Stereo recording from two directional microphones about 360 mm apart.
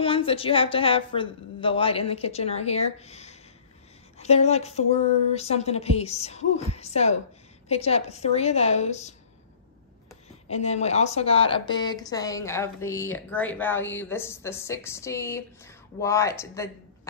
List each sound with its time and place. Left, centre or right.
0.0 s speech: centre
10.5 s speech: centre